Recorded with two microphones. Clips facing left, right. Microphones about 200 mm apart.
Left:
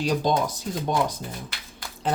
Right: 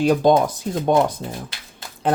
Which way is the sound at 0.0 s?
55° right (ahead or behind).